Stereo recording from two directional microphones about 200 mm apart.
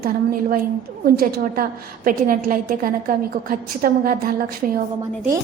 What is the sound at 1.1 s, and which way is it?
A woman's voice, 45° right (ahead or behind).